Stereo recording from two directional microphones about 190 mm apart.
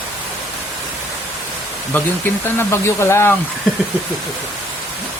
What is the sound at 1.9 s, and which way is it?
Speech, 10° left (ahead or behind).